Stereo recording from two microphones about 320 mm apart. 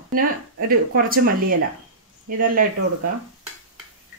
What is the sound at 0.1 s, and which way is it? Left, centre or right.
Speech, right.